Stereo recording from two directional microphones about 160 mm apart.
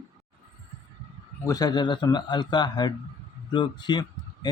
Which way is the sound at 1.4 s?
20° left (ahead or behind).